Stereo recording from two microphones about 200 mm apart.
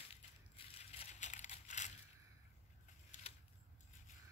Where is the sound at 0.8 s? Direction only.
30° left (ahead or behind).